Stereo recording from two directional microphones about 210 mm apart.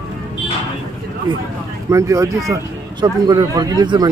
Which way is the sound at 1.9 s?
15° right (ahead or behind).